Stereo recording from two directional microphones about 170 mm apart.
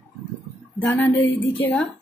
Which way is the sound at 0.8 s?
10° left (ahead or behind).